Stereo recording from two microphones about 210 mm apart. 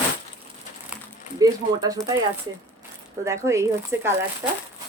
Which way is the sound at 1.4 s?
15° right (ahead or behind).